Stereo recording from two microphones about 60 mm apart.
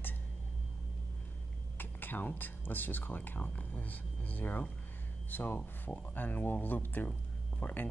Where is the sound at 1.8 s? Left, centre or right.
Left.